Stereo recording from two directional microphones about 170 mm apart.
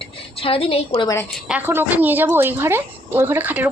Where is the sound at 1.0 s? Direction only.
20° left (ahead or behind).